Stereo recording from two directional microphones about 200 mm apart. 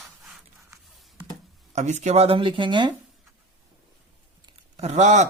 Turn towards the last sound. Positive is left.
turn(degrees=-35)  # may be behind; listen again after turning